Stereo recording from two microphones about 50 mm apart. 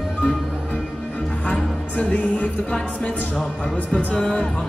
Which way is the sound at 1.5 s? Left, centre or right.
Left.